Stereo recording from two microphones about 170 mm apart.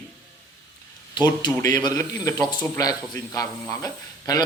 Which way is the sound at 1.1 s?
25° left (ahead or behind).